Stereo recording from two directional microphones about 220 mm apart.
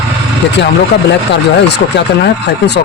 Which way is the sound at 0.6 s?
50° left (ahead or behind).